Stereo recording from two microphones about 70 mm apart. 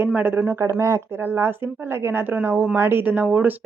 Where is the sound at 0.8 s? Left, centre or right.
Right.